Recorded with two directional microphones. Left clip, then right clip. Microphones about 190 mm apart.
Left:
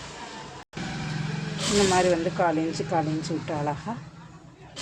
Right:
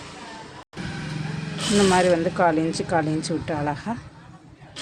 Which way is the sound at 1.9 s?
20° right (ahead or behind).